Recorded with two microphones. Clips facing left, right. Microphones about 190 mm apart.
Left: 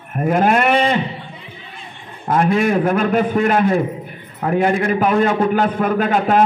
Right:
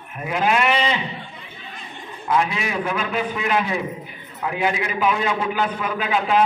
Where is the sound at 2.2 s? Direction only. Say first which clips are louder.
Left 7 dB; 50° left (ahead or behind).